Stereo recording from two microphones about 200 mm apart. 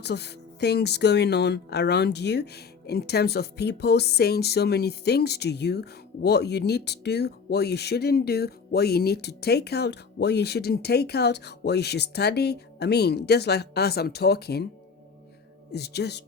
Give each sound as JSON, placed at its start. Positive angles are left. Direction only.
{"t": 0.0, "sound": "speech", "side_deg": 55}
{"t": 15.7, "sound": "speech", "side_deg": 55}